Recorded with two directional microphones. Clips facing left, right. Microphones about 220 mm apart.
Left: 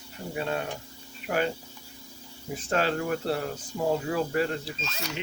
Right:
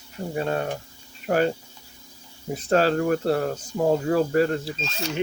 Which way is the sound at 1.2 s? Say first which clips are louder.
Right 6 dB; 40° right (ahead or behind).